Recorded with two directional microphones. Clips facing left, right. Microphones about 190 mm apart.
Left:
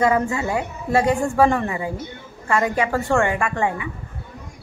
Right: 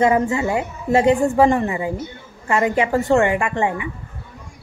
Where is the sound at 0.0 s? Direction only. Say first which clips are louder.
Right 2 dB; 20° right (ahead or behind).